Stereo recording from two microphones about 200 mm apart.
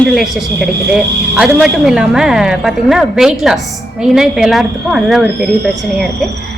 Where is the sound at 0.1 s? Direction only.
Centre (ahead or behind).